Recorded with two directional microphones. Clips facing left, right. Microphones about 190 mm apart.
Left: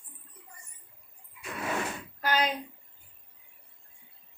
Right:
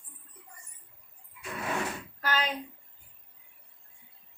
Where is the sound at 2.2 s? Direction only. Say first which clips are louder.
Left 3 dB; 15° left (ahead or behind).